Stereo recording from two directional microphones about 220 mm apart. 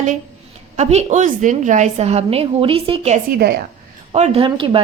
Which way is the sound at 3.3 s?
45° right (ahead or behind).